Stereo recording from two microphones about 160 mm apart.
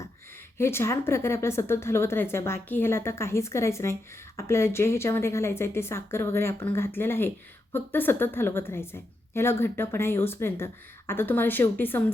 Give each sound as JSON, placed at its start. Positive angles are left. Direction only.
{"t": 0.6, "sound": "speech", "side_deg": 15}